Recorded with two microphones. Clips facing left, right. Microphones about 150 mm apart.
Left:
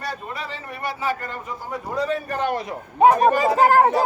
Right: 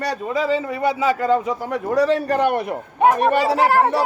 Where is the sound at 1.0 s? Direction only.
90° right.